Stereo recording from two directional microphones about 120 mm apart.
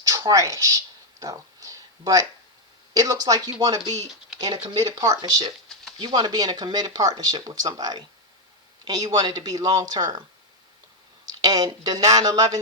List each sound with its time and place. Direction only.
0.0 s speech: 30° right (ahead or behind)
1.2 s a sound: 30° right (ahead or behind)
2.9 s speech: 30° right (ahead or behind)
11.3 s speech: 35° right (ahead or behind)